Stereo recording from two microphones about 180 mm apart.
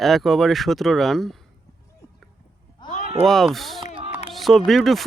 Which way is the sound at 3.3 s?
Centre (ahead or behind).